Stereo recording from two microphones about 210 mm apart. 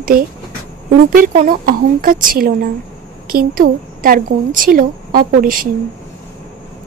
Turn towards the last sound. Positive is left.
turn(degrees=-40)  # may be behind; listen again after turning